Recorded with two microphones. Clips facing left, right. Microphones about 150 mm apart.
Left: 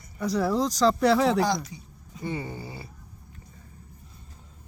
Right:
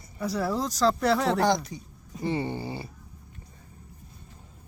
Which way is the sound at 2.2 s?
30° right (ahead or behind).